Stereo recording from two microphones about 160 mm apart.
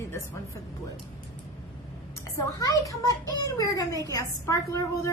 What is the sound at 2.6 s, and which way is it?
A woman's voice, 20° left (ahead or behind).